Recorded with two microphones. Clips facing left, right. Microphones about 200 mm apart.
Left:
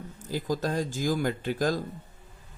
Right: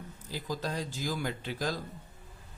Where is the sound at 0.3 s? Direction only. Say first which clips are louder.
Left 7 dB; 45° left (ahead or behind).